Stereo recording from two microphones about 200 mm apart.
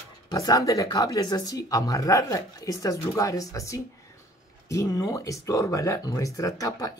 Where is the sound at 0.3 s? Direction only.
20° left (ahead or behind).